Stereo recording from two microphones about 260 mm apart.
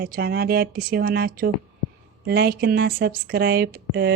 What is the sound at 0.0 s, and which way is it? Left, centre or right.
Speech, right.